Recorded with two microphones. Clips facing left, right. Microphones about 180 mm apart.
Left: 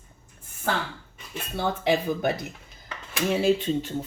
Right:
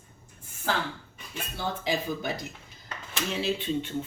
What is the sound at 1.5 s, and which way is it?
Speech, 60° left (ahead or behind).